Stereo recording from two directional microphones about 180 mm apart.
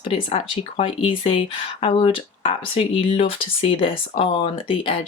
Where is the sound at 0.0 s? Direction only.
30° left (ahead or behind).